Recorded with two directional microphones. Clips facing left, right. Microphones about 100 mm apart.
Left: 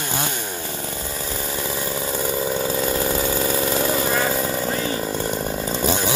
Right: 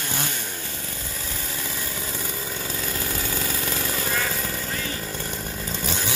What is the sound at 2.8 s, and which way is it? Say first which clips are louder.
Chainsaw: left 9 dB; 30° left (ahead or behind).